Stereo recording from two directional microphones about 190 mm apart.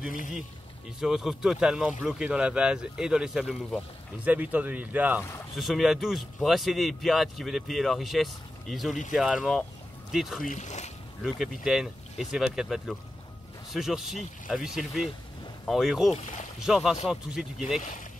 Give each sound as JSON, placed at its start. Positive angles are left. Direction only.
{"t": 0.9, "sound": "speech", "side_deg": 0}
{"t": 10.4, "sound": "speech", "side_deg": 40}
{"t": 11.2, "sound": "speech", "side_deg": 0}